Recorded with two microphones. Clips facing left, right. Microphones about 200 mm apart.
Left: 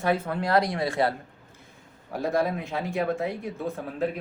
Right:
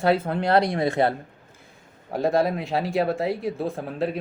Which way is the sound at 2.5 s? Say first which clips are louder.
Right 5 dB; 80° right.